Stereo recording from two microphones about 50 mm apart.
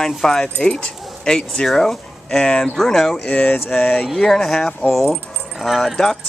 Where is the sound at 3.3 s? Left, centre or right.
Left.